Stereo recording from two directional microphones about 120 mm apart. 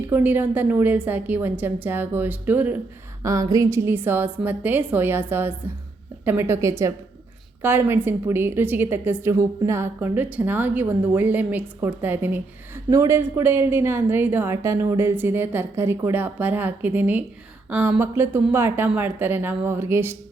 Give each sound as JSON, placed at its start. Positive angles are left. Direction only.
{"t": 0.1, "sound": "a woman's voice", "side_deg": -15}
{"t": 3.2, "sound": "a woman's voice", "side_deg": -30}